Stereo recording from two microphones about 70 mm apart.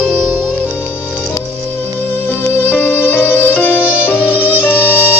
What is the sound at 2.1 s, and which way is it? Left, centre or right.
Music, left.